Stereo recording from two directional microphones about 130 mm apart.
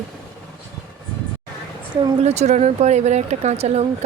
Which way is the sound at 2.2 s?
60° right (ahead or behind).